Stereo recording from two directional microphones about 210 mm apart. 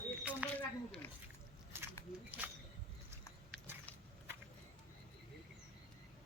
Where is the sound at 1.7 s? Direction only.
10° right (ahead or behind).